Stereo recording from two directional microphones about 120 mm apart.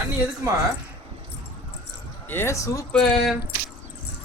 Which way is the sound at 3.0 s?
5° left (ahead or behind).